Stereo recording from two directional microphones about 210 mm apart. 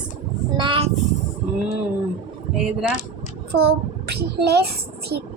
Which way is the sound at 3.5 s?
50° right (ahead or behind).